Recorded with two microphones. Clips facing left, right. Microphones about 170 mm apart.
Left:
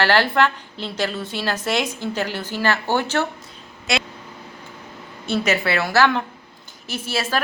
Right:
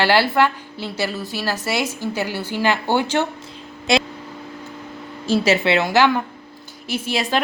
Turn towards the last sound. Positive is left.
turn(degrees=-15)  # may be behind; listen again after turning